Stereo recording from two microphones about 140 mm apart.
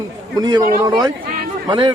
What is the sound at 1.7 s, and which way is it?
Speech, 35° right (ahead or behind).